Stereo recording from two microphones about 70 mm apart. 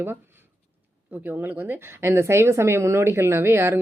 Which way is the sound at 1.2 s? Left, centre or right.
Right.